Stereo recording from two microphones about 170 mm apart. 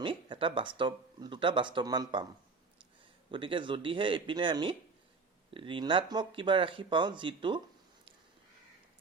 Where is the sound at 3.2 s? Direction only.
30° right (ahead or behind).